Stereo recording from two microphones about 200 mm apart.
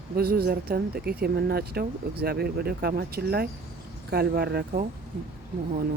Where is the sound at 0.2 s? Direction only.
50° right (ahead or behind).